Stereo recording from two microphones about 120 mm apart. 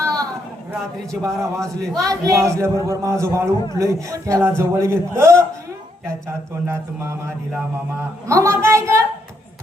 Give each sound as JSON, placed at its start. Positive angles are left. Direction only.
{"t": 0.0, "sound": "a sound", "side_deg": -30}
{"t": 1.2, "sound": "a man's voice", "side_deg": -25}
{"t": 6.7, "sound": "a man's voice", "side_deg": -25}
{"t": 8.3, "sound": "a man's voice", "side_deg": -25}